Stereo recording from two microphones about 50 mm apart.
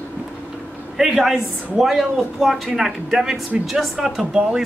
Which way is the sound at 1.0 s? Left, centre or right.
Centre.